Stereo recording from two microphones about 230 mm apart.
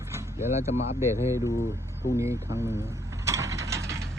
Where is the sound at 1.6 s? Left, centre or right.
Centre.